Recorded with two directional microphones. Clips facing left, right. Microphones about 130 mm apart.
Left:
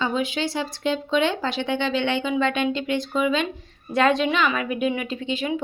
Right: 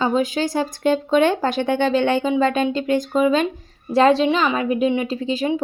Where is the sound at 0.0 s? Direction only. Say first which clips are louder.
Right 5 dB; 40° right (ahead or behind).